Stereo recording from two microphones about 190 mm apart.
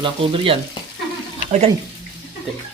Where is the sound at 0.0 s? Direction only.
30° right (ahead or behind).